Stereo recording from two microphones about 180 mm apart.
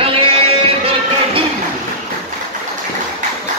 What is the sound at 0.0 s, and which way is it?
Music, 35° right (ahead or behind).